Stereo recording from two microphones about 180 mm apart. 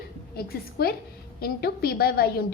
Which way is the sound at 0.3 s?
60° left (ahead or behind).